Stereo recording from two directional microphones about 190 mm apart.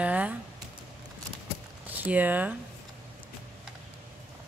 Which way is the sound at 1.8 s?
10° right (ahead or behind).